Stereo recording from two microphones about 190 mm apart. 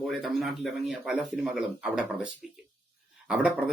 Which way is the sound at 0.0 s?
Centre (ahead or behind).